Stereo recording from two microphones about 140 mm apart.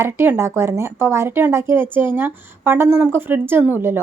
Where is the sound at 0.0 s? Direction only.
20° right (ahead or behind).